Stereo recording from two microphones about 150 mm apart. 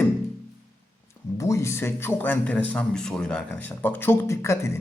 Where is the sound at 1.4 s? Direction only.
20° left (ahead or behind).